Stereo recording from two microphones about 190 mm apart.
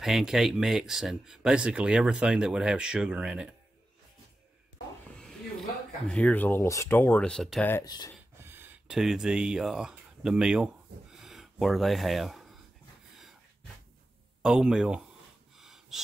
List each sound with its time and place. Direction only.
0.0 s speech: centre (ahead or behind)
5.2 s speech: 5° left (ahead or behind)
7.7 s speech: 20° left (ahead or behind)
8.4 s speech: 10° right (ahead or behind)
14.4 s speech: 5° right (ahead or behind)
15.6 s snort: centre (ahead or behind)